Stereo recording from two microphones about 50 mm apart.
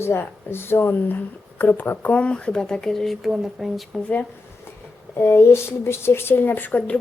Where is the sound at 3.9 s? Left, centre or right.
Centre.